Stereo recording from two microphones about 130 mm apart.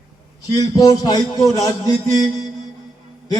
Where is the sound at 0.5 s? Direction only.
30° left (ahead or behind).